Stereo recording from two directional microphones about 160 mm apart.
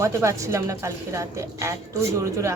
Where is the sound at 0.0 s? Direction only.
20° right (ahead or behind).